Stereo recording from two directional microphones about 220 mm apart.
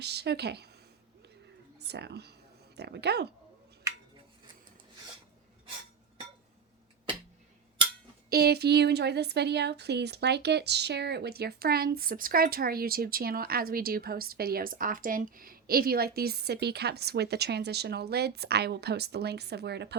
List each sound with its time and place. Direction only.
0.0 s speech: 50° right (ahead or behind)
1.8 s speech: 50° right (ahead or behind)
8.3 s speech: 45° right (ahead or behind)